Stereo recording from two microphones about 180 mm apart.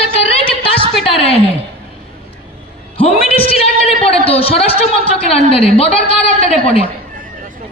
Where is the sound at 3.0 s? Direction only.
30° left (ahead or behind).